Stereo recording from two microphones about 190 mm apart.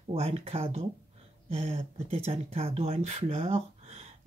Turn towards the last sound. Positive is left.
turn(degrees=-35)  # may be behind; listen again after turning